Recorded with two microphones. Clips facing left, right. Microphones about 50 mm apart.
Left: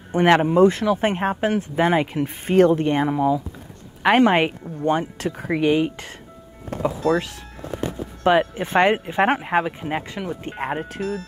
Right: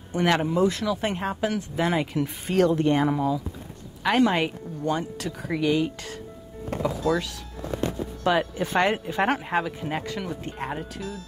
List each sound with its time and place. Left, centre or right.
0.1 s speech: left
10.4 s speech: left